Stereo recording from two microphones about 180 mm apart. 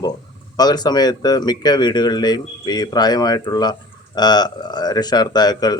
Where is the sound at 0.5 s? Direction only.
20° left (ahead or behind).